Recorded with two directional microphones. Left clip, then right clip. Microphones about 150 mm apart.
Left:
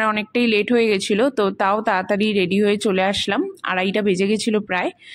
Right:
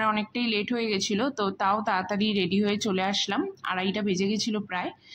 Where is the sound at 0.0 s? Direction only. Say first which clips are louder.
Left 7 dB; 40° left (ahead or behind).